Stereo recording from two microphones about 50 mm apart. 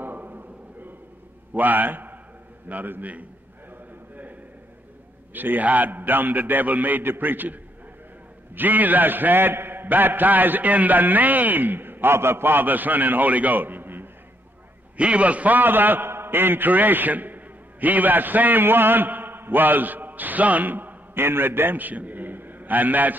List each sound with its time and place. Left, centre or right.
0.0 s a sound: right
1.5 s a man's voice: right
3.7 s a sound: right
5.3 s a man's voice: right
8.5 s a man's voice: right
15.0 s a man's voice: right